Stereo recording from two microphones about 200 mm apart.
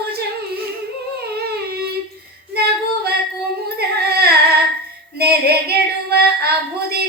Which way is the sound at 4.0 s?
50° right (ahead or behind).